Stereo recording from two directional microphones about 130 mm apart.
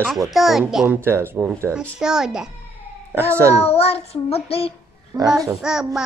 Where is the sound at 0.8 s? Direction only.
15° right (ahead or behind).